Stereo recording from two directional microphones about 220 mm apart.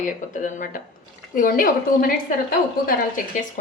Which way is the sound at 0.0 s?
35° left (ahead or behind).